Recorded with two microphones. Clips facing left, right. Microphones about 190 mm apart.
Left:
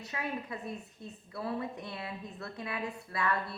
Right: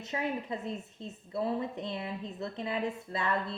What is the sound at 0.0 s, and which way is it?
A woman's voice, 20° right (ahead or behind).